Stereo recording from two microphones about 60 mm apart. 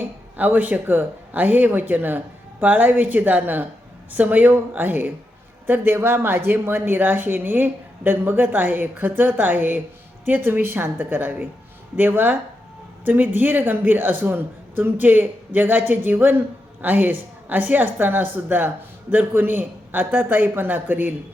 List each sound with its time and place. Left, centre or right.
0.0 s a woman's voice: right